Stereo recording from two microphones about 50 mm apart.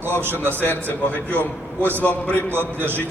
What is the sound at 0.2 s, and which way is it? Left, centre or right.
Speech, right.